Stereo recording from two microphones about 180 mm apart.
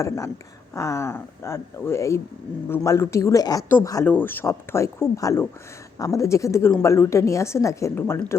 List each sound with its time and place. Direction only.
0.7 s a woman's voice: 15° left (ahead or behind)